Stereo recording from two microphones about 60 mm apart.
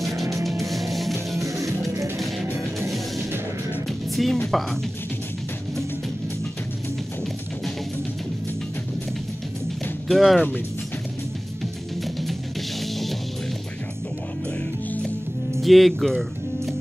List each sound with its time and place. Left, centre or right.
0.0 s music: centre
1.4 s music: right
4.1 s music: centre
10.0 s speech: centre
15.6 s music: centre